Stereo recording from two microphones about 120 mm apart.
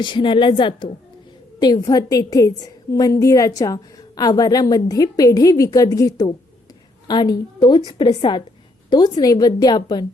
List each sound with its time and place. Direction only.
0.0 s a woman's voice: 40° left (ahead or behind)